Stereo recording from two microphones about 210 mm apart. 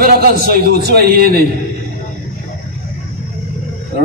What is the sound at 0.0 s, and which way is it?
A man's voice, 45° right (ahead or behind).